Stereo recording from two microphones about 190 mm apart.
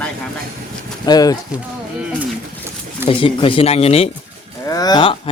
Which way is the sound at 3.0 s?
25° left (ahead or behind).